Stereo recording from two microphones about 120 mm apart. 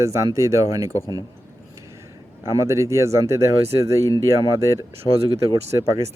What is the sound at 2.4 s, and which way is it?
Speech, 25° right (ahead or behind).